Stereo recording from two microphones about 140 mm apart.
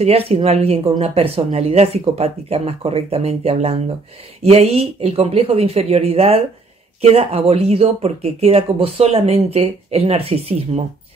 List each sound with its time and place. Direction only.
0.0 s speech: 50° right (ahead or behind)